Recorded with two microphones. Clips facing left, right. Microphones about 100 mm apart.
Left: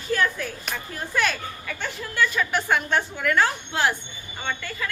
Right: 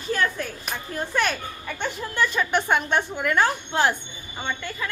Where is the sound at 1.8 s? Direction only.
25° right (ahead or behind).